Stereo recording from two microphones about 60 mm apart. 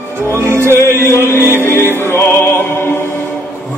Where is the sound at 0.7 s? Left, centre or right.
Left.